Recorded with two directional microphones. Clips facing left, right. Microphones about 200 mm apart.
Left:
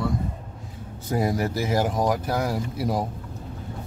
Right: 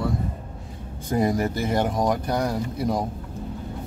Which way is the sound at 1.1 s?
5° left (ahead or behind).